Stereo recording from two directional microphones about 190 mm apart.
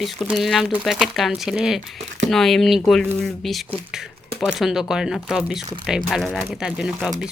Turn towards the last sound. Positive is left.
turn(degrees=-5)  # may be behind; listen again after turning